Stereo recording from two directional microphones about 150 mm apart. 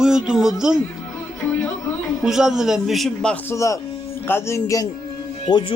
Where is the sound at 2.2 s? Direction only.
5° right (ahead or behind).